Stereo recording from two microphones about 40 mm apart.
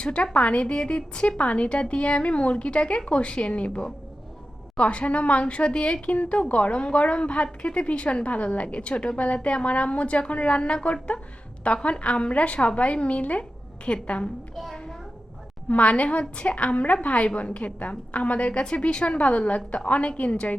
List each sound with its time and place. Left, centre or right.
0.0 s a woman's voice: left
6.1 s a woman's voice: left
14.5 s a sound: centre
15.7 s a woman's voice: left